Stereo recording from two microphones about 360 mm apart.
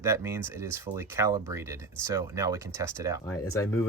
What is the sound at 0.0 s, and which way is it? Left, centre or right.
Speech, centre.